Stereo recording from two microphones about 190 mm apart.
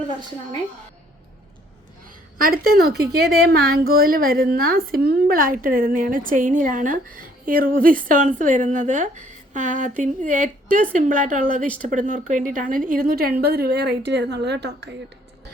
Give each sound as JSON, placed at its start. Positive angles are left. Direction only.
{"t": 2.4, "sound": "a woman's voice", "side_deg": -50}